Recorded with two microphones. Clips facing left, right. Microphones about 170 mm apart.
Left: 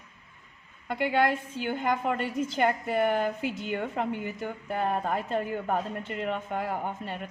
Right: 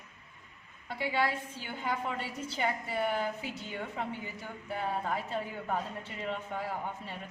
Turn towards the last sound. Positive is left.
turn(degrees=60)  # may be behind; listen again after turning